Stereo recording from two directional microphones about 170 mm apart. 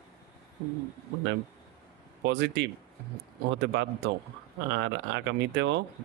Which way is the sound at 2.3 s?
90° right.